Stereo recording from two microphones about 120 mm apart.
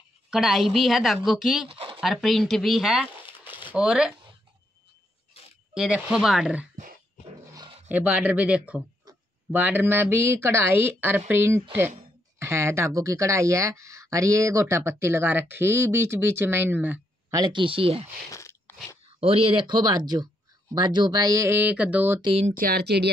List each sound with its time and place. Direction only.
0.3 s a woman's voice: centre (ahead or behind)
1.7 s a sound: 50° right (ahead or behind)
2.0 s speech: centre (ahead or behind)
5.8 s speech: 10° right (ahead or behind)
7.9 s speech: 15° right (ahead or behind)
17.3 s speech: 40° right (ahead or behind)
18.3 s crunch: 25° left (ahead or behind)
19.0 s speech: 50° right (ahead or behind); by 22.2 s 15° right (ahead or behind)
22.2 s speech: 55° right (ahead or behind)